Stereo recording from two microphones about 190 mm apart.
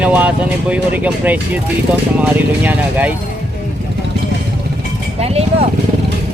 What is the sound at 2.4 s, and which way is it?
Speech, 10° right (ahead or behind).